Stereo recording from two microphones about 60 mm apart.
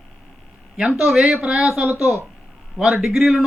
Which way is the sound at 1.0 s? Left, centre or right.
Centre.